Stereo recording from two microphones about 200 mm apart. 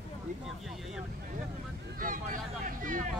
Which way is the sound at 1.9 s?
45° right (ahead or behind).